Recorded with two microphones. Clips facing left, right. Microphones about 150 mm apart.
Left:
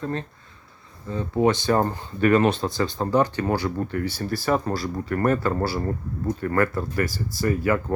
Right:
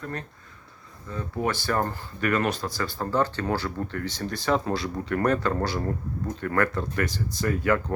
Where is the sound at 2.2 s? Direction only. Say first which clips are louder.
Left 7 dB; 30° left (ahead or behind).